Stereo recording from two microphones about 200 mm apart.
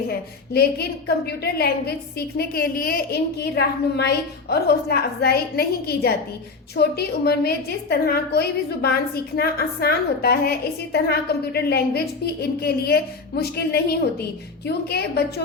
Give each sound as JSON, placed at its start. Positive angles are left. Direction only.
{"t": 0.1, "sound": "a woman's voice", "side_deg": 50}